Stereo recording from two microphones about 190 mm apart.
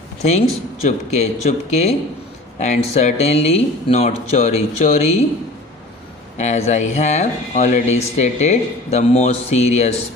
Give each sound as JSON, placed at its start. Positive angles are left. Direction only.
{"t": 0.2, "sound": "speech", "side_deg": 35}
{"t": 6.3, "sound": "speech", "side_deg": 40}